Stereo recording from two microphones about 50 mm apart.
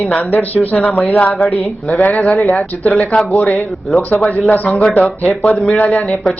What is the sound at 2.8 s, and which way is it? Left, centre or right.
Speech, centre.